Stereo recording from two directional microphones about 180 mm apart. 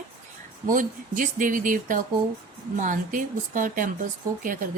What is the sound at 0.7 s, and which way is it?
A woman's voice, 50° right (ahead or behind).